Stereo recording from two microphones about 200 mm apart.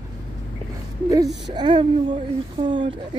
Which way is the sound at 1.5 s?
25° right (ahead or behind).